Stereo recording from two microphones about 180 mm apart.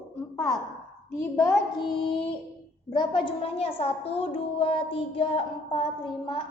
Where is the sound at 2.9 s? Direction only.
25° left (ahead or behind).